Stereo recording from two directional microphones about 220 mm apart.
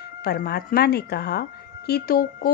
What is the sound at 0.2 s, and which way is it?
A woman's voice, 45° left (ahead or behind).